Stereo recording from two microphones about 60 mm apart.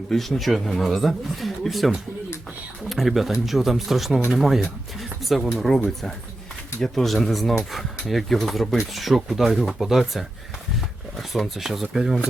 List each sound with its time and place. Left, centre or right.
0.1 s speech: centre
2.9 s speech: centre
4.9 s a sound: centre
5.5 s speech: centre
6.8 s speech: centre